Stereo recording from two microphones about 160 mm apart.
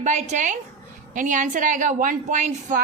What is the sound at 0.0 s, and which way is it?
A woman's voice, 50° right (ahead or behind).